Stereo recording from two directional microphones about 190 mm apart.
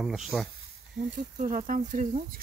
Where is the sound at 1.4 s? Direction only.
45° right (ahead or behind).